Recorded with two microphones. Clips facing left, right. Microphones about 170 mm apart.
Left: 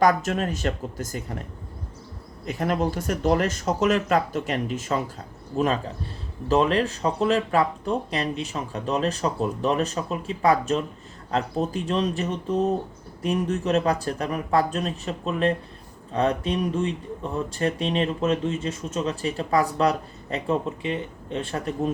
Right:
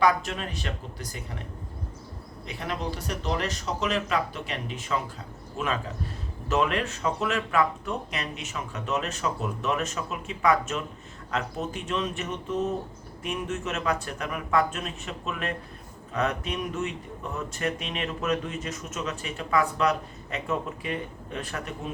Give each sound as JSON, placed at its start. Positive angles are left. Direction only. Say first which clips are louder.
{"t": 0.0, "sound": "speech", "louder": "left 4 dB", "side_deg": 45}
{"t": 2.5, "sound": "speech", "louder": "left 8 dB", "side_deg": 45}